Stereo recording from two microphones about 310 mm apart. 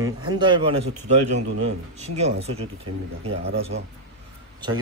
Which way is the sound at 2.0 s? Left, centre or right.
Right.